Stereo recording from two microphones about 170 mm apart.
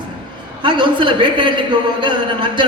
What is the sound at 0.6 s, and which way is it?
A man's voice, 30° right (ahead or behind).